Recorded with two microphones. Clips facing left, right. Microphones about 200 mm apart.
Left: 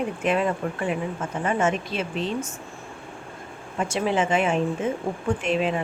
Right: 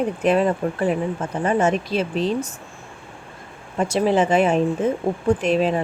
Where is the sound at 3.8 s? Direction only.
35° right (ahead or behind).